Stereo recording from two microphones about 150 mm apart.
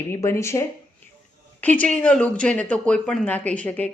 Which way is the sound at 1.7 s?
10° left (ahead or behind).